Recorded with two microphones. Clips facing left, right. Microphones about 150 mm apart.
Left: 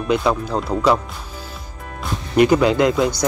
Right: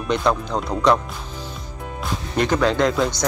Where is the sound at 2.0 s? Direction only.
10° left (ahead or behind).